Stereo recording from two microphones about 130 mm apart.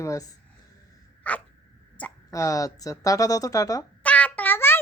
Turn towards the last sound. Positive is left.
turn(degrees=15)  # may be behind; listen again after turning